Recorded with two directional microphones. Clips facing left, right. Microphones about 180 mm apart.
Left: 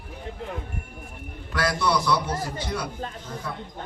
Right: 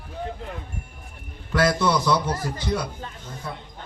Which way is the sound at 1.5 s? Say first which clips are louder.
Right 5 dB; 25° right (ahead or behind).